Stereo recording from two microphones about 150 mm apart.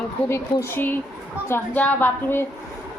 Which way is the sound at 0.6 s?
15° left (ahead or behind).